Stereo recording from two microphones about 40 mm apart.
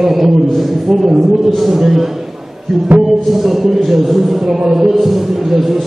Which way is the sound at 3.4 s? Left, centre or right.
Centre.